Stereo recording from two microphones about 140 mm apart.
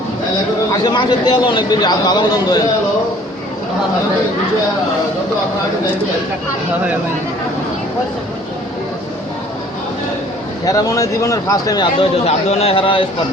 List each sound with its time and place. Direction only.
0.7 s a man's voice: 30° left (ahead or behind)
10.7 s speech: 25° left (ahead or behind)
11.9 s a man's voice: 45° left (ahead or behind)